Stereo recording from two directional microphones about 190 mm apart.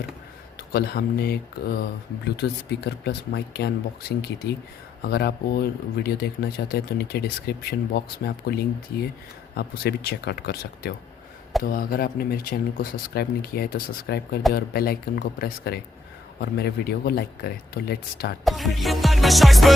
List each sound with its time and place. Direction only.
0.7 s speech: 55° left (ahead or behind)
5.0 s speech: 55° left (ahead or behind)
18.4 s music: centre (ahead or behind)